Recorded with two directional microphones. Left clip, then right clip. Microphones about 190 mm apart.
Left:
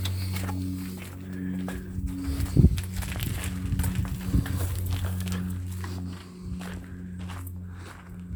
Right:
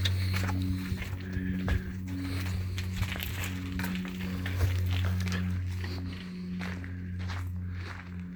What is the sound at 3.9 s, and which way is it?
Music, 35° left (ahead or behind).